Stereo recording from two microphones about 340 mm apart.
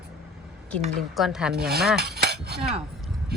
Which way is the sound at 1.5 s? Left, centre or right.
Right.